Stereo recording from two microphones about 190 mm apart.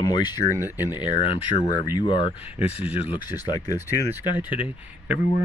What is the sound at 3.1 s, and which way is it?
Speech, 20° left (ahead or behind).